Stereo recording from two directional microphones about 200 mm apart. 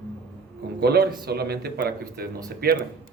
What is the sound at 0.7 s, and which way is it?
A man's voice, 55° right (ahead or behind).